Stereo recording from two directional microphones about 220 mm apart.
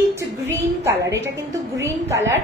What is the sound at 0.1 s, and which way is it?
A woman's voice, 10° right (ahead or behind).